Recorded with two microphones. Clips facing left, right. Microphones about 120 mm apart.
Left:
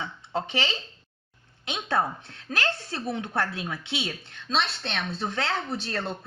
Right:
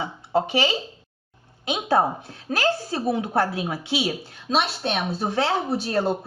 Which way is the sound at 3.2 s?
30° right (ahead or behind).